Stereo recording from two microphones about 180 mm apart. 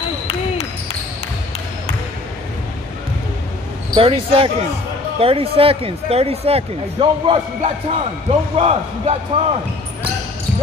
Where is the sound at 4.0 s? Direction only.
30° right (ahead or behind).